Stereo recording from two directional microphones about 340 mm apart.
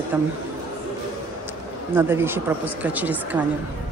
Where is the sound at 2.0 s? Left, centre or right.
Centre.